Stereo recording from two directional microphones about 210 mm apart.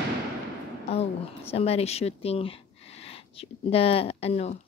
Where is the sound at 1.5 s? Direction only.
30° left (ahead or behind).